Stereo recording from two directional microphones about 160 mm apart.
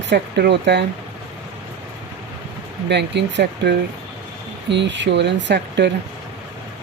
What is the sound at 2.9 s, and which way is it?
Speech, 90° right.